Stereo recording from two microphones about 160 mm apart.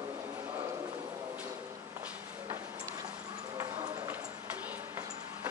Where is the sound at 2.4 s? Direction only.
20° right (ahead or behind).